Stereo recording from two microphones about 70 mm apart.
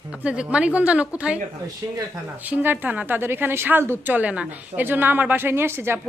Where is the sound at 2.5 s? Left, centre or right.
Right.